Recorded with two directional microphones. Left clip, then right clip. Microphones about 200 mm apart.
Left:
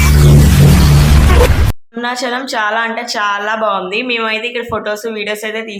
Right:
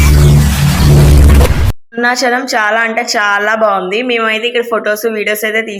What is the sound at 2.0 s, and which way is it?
A woman's voice, 20° right (ahead or behind).